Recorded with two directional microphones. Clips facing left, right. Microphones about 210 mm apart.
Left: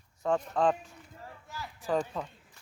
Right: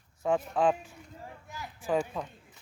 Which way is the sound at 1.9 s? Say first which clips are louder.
Right 1 dB; 10° right (ahead or behind).